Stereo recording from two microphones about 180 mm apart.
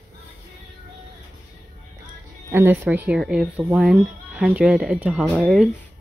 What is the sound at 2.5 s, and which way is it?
Speech, 10° right (ahead or behind).